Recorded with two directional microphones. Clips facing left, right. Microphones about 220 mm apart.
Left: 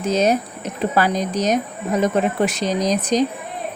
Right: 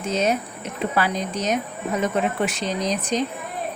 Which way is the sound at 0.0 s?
40° left (ahead or behind).